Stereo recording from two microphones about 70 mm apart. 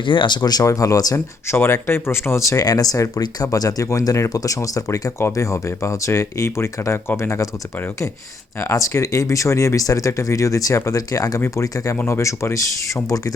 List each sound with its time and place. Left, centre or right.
0.3 s speech: left
0.6 s speech: left
1.5 s speech: left
2.6 s speech: left
8.6 s speech: left
11.3 s speech: left